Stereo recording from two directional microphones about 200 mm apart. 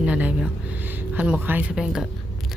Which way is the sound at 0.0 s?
5° right (ahead or behind).